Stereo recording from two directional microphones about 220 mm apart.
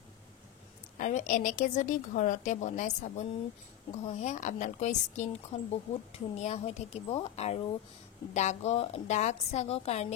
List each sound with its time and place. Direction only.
0.9 s a woman's voice: 35° left (ahead or behind)